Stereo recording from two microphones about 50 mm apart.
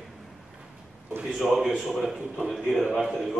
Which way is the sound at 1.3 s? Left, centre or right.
Centre.